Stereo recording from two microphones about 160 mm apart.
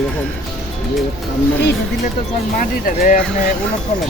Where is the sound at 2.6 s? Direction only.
60° left (ahead or behind).